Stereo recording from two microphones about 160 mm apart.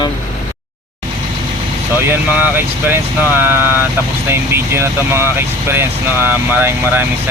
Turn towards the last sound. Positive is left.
turn(degrees=-15)  # may be behind; listen again after turning